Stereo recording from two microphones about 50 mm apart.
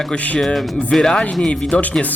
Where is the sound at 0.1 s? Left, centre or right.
Centre.